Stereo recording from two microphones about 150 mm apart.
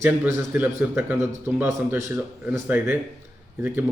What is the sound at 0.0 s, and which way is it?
Speech, 15° right (ahead or behind).